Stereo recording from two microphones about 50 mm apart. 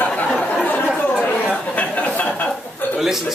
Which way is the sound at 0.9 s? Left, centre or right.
Left.